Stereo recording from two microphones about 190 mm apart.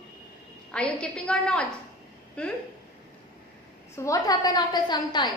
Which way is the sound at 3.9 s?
15° left (ahead or behind).